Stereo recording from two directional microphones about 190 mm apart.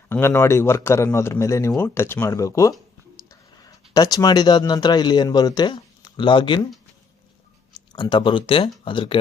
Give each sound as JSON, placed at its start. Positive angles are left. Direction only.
{"t": 0.1, "sound": "a man's voice", "side_deg": 10}
{"t": 7.9, "sound": "speech", "side_deg": 25}